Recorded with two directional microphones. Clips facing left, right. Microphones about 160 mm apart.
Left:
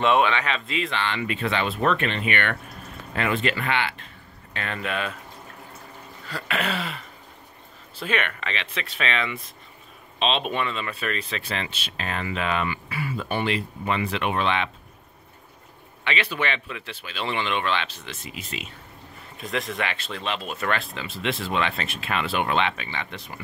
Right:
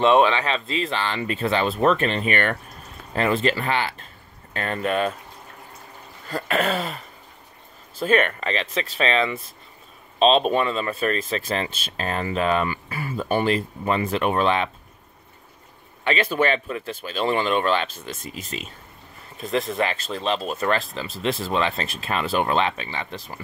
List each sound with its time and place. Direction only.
0.0 s speech: 30° right (ahead or behind)
6.2 s throat clearing: 45° right (ahead or behind)
8.0 s speech: 40° right (ahead or behind)
16.0 s speech: 40° right (ahead or behind)